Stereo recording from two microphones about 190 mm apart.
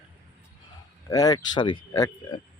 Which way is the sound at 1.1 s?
20° left (ahead or behind).